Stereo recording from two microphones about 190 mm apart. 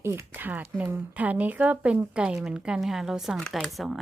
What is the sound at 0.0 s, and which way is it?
A woman's voice, 15° right (ahead or behind).